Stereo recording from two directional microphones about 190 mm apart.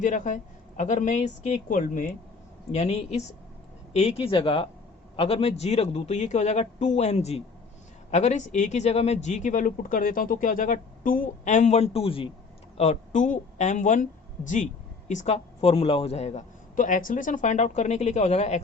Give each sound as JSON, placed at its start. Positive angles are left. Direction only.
{"t": 0.0, "sound": "a woman's voice", "side_deg": 40}